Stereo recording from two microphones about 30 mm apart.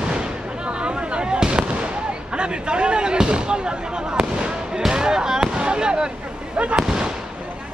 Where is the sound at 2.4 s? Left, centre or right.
Right.